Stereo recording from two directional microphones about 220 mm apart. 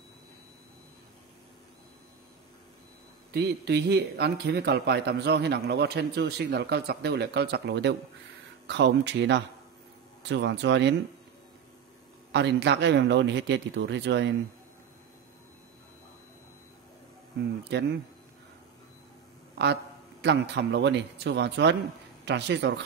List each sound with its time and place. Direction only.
3.3 s speech: 50° right (ahead or behind)
12.3 s speech: 50° right (ahead or behind)
17.7 s speech: 50° right (ahead or behind)
19.6 s speech: 50° right (ahead or behind)